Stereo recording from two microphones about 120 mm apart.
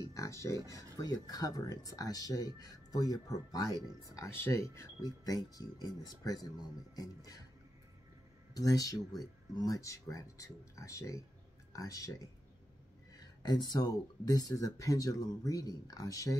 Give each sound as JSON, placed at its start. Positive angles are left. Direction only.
{"t": 0.1, "sound": "speech", "side_deg": 25}
{"t": 8.5, "sound": "speech", "side_deg": 30}